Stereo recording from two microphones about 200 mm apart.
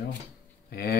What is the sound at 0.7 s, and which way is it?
Speech, 50° left (ahead or behind).